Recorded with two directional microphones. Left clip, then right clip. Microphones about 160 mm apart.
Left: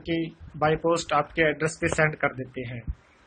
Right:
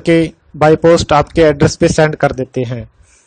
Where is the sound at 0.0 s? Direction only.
70° right (ahead or behind).